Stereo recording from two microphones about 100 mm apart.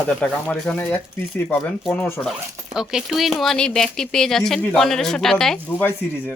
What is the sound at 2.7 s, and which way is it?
Speech, 5° right (ahead or behind).